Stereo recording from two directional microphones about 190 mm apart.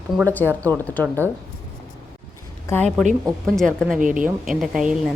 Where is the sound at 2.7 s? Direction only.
5° left (ahead or behind).